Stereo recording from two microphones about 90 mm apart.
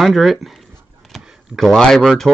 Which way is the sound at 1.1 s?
Centre (ahead or behind).